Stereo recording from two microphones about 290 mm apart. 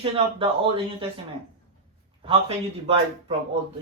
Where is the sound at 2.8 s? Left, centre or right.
Right.